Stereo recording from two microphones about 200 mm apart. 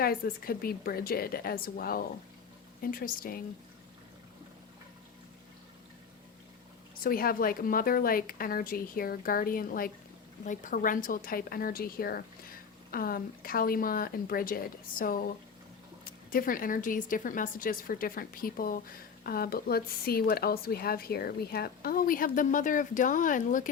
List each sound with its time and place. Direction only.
0.0 s a woman's voice: 50° left (ahead or behind)
7.0 s a woman's voice: 45° left (ahead or behind)
16.3 s a woman's voice: 45° left (ahead or behind)